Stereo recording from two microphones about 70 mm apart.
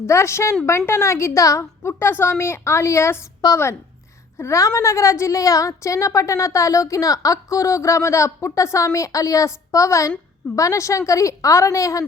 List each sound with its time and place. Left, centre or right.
0.0 s a woman's voice: left
1.9 s a woman's voice: left
4.4 s a woman's voice: left